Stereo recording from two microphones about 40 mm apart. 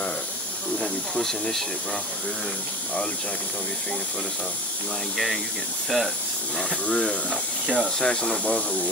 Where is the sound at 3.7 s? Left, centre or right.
Left.